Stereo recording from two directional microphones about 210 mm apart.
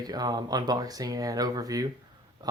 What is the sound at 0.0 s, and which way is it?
Speech, 20° right (ahead or behind).